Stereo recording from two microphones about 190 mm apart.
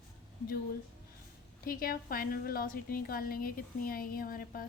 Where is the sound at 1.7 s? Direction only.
50° left (ahead or behind).